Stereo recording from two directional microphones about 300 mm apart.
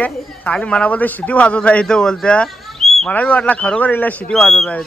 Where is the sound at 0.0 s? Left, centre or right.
Centre.